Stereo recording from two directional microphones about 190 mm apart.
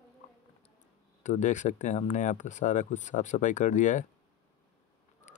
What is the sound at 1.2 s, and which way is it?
Speech, 40° left (ahead or behind).